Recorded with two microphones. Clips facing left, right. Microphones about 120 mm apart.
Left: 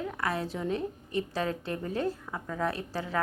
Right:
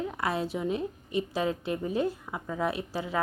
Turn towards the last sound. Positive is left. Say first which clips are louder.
# right 1 dB
turn(degrees=-15)  # may be behind; listen again after turning